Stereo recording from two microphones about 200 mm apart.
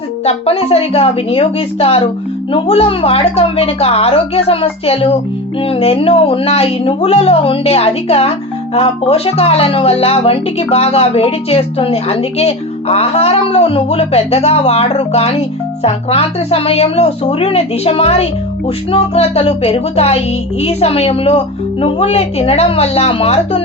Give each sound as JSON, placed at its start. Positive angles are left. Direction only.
{"t": 0.3, "sound": "speech", "side_deg": 30}